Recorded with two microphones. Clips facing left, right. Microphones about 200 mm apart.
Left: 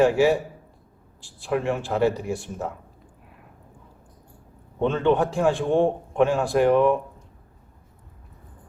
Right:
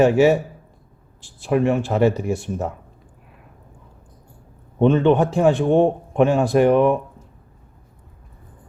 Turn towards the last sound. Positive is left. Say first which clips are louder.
# right 3 dB
turn(degrees=-20)  # may be behind; listen again after turning